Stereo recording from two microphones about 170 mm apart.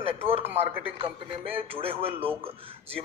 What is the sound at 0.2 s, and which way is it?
Speech, 35° right (ahead or behind).